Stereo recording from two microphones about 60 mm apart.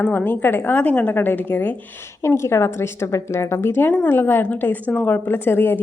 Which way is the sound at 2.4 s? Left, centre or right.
Left.